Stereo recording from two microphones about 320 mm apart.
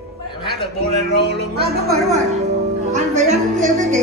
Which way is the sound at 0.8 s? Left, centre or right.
Right.